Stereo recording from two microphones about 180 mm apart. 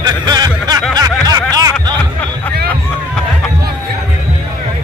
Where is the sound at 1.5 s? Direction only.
20° right (ahead or behind).